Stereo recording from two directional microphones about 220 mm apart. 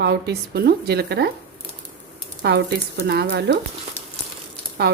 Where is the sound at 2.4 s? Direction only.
50° right (ahead or behind).